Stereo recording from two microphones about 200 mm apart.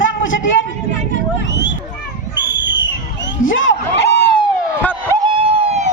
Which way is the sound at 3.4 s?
70° left (ahead or behind).